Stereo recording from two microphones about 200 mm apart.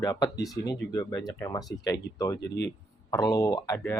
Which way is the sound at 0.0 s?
15° left (ahead or behind).